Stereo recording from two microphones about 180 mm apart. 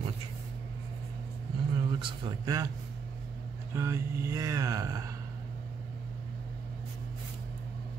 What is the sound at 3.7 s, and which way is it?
Speech, 15° right (ahead or behind).